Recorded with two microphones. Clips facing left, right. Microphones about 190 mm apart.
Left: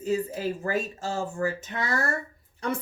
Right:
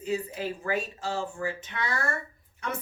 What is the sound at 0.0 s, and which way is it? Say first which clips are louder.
Speech: left 4 dB; 45° left (ahead or behind).